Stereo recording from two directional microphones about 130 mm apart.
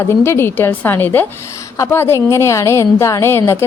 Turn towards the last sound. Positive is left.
turn(degrees=20)  # may be behind; listen again after turning